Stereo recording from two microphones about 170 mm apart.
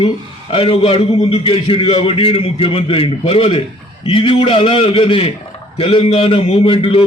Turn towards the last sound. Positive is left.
turn(degrees=30)  # may be behind; listen again after turning